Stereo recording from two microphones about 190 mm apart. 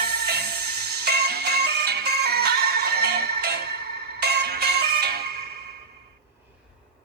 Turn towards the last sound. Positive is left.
turn(degrees=-60)  # may be behind; listen again after turning